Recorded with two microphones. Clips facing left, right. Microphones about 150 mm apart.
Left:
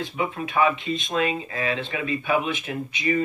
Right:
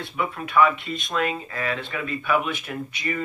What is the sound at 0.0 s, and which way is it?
Speech, 20° left (ahead or behind).